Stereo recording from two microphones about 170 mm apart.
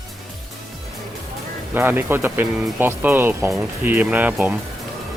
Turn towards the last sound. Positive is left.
turn(degrees=-10)  # may be behind; listen again after turning